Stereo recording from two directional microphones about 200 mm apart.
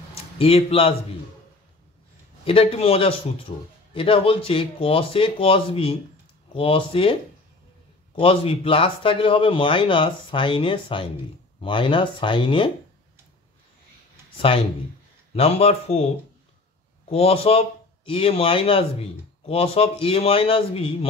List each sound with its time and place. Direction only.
0.1 s speech: 30° left (ahead or behind)
2.4 s speech: 30° left (ahead or behind)
8.2 s speech: 30° left (ahead or behind)
15.3 s a man's voice: 30° left (ahead or behind)
17.1 s speech: 30° left (ahead or behind)